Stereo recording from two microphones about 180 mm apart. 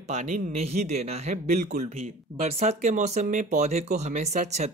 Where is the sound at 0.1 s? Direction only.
40° right (ahead or behind).